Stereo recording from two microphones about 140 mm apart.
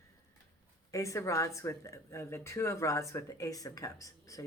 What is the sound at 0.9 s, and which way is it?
Speech, 20° left (ahead or behind).